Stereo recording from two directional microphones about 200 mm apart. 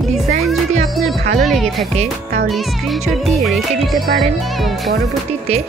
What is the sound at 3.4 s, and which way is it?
Music, centre (ahead or behind).